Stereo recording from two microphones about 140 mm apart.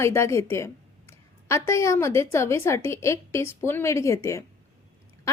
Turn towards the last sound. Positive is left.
turn(degrees=20)  # may be behind; listen again after turning